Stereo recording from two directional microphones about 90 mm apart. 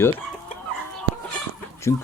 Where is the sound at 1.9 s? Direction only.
35° left (ahead or behind).